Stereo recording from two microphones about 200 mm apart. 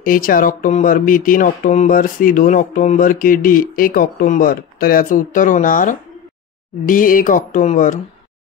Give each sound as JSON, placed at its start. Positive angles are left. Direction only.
{"t": 0.0, "sound": "speech", "side_deg": 45}